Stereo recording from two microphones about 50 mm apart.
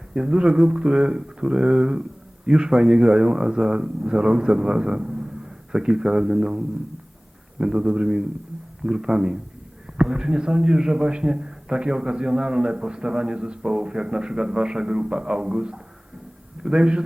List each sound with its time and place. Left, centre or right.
0.1 s speech: centre